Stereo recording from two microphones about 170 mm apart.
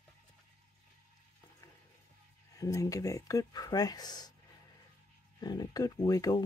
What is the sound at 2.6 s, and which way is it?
Speech, 20° left (ahead or behind).